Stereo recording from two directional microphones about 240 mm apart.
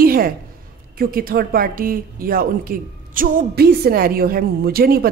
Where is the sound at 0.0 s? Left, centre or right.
Right.